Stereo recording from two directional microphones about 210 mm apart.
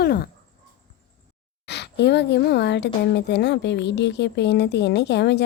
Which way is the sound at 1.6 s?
55° left (ahead or behind).